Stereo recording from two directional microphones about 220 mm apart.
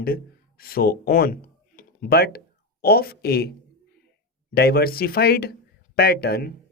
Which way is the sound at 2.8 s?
45° left (ahead or behind).